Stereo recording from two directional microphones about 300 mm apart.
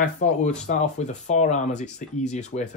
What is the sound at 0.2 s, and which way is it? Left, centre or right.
Speech, left.